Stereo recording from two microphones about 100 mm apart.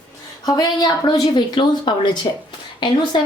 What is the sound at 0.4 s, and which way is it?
A woman's voice, 40° left (ahead or behind).